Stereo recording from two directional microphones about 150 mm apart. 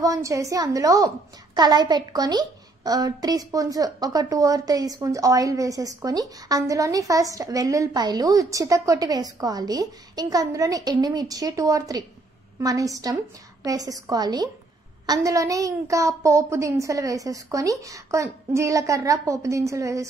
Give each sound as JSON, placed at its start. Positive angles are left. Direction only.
{"t": 0.0, "sound": "a woman's voice", "side_deg": -20}